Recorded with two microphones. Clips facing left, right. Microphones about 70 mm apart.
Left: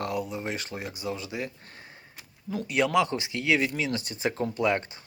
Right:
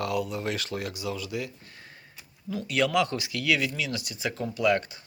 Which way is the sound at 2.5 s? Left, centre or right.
Left.